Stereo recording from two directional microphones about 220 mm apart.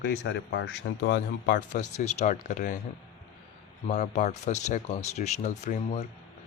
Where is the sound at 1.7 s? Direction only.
30° left (ahead or behind).